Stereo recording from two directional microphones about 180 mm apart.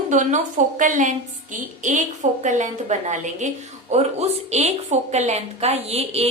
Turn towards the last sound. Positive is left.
turn(degrees=-35)  # may be behind; listen again after turning